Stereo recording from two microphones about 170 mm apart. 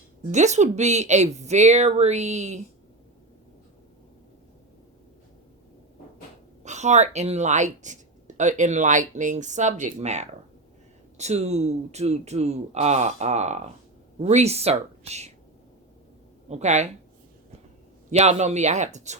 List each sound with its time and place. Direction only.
0.3 s speech: 45° right (ahead or behind)
6.7 s speech: 45° right (ahead or behind)
16.5 s speech: 40° right (ahead or behind)
18.1 s speech: 40° right (ahead or behind)